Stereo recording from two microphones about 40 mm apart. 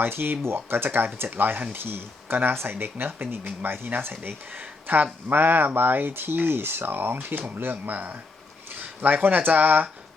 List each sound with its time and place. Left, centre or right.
0.0 s speech: right
0.9 s speech: right
7.9 s speech: right